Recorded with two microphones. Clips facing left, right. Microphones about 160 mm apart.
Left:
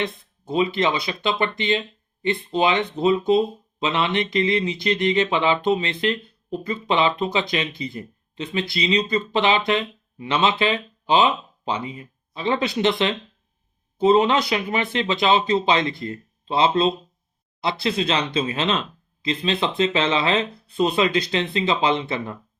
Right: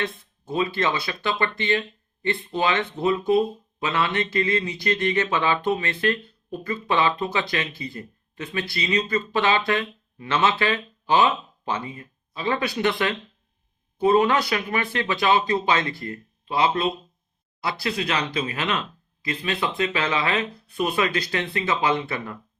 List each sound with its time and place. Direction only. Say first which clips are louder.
0.0 s speech: left 2 dB; 20° left (ahead or behind)